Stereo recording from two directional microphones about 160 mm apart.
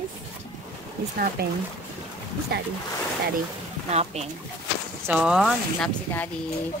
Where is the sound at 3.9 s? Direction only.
40° right (ahead or behind).